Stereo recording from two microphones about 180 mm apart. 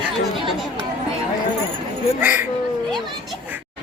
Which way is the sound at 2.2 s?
10° right (ahead or behind).